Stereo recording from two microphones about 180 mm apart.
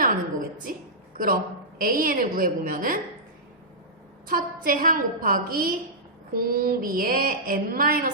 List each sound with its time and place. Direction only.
0.6 s a sound: 50° right (ahead or behind)
1.8 s a woman's voice: 55° right (ahead or behind)
4.3 s a woman's voice: 50° right (ahead or behind)